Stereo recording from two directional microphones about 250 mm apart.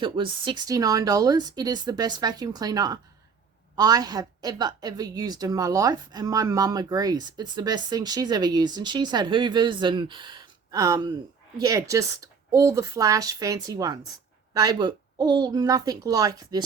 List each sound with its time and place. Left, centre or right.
0.0 s a woman's voice: centre